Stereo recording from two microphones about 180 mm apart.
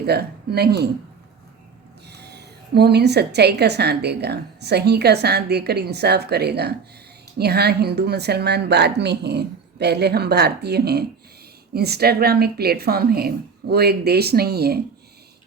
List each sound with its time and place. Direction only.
0.0 s speech: 65° right (ahead or behind)
2.0 s a woman's voice: 65° right (ahead or behind)